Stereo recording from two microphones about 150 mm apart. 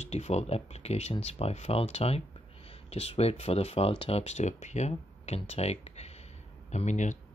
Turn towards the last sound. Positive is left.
turn(degrees=50)  # may be behind; listen again after turning